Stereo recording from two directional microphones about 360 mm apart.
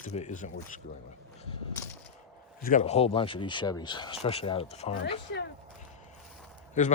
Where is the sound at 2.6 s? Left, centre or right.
Centre.